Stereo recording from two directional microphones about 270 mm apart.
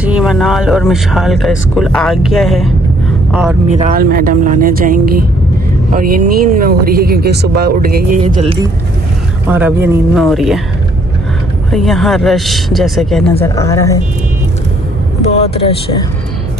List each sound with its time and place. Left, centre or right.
0.0 s speech: centre
3.6 s speech: right
8.2 s speech: right
9.5 s speech: centre
11.7 s speech: centre
13.4 s speech: centre
15.2 s speech: left